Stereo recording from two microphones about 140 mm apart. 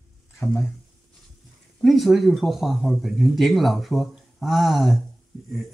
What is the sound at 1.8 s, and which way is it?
Speech, centre (ahead or behind).